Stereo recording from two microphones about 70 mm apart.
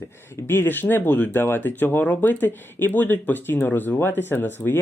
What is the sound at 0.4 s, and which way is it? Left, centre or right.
Speech, left.